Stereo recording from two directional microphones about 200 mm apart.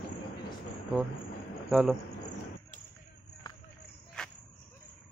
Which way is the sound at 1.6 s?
Centre (ahead or behind).